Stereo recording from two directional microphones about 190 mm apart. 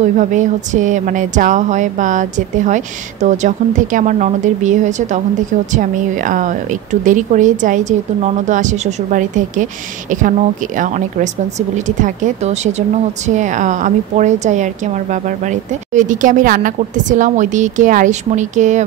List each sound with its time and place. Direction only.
0.0 s speech: 40° right (ahead or behind)
11.7 s speech: 40° right (ahead or behind)